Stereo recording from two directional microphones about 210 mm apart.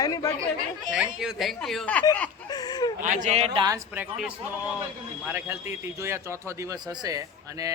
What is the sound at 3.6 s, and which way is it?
A man's voice, 10° right (ahead or behind).